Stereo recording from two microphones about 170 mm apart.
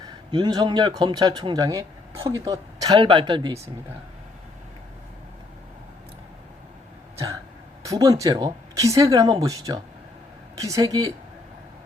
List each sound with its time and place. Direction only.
0.3 s a man's voice: 25° right (ahead or behind)
7.9 s a man's voice: 20° right (ahead or behind)